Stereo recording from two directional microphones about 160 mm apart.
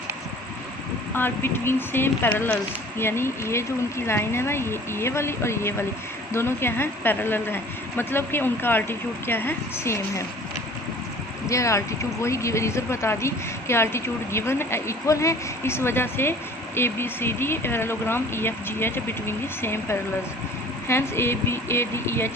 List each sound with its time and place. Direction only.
1.1 s speech: 15° left (ahead or behind)
11.4 s speech: 20° left (ahead or behind)